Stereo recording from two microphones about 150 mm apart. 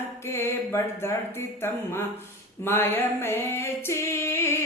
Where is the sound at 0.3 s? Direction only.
15° left (ahead or behind).